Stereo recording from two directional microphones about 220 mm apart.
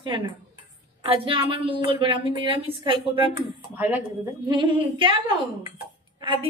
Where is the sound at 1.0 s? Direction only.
25° right (ahead or behind).